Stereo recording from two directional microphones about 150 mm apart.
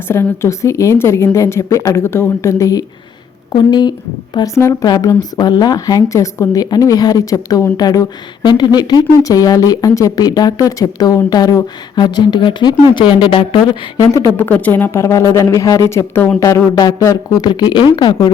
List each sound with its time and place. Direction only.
0.1 s speech: 20° left (ahead or behind); by 14.0 s 35° left (ahead or behind)
14.0 s speech: 20° left (ahead or behind)